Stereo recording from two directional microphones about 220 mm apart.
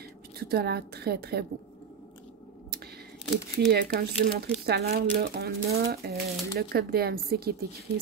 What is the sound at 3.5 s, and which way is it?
A woman's voice, 50° right (ahead or behind).